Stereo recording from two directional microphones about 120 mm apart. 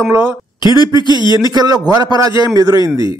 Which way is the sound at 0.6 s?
35° left (ahead or behind).